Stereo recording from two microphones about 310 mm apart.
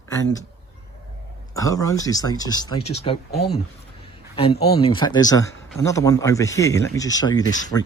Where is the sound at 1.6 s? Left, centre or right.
Centre.